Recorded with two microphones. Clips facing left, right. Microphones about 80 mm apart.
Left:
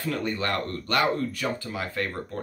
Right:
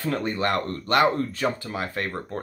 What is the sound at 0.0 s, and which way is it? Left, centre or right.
Speech, right.